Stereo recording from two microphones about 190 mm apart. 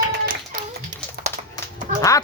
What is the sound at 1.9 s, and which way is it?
Speech, 20° left (ahead or behind).